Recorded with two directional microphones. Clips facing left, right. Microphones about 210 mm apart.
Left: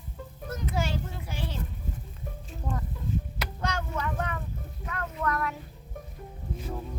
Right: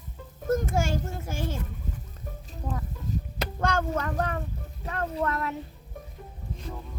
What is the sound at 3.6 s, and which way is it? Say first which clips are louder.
Speech: right 5 dB; 50° right (ahead or behind).